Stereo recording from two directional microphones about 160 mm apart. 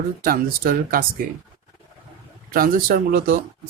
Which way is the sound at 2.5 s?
65° right (ahead or behind).